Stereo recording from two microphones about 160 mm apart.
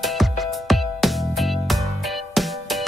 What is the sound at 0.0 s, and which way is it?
Music, centre (ahead or behind).